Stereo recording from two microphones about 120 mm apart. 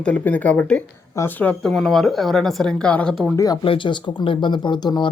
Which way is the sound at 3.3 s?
30° left (ahead or behind).